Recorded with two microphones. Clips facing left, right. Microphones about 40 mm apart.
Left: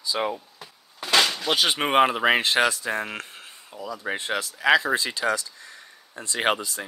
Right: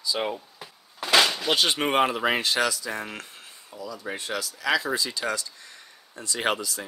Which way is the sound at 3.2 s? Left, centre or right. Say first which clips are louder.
Left 3 dB; left.